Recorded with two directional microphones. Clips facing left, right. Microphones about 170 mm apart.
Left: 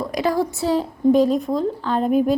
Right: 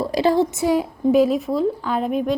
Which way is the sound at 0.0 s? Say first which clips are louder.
Right 3 dB; 30° right (ahead or behind).